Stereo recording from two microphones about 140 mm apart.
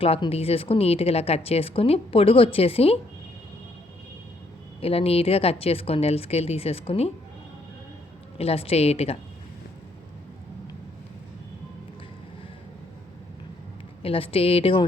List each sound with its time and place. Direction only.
0.0 s speech: 45° left (ahead or behind)
4.8 s speech: 45° left (ahead or behind)
8.4 s speech: 45° left (ahead or behind)
14.0 s a woman's voice: 40° left (ahead or behind)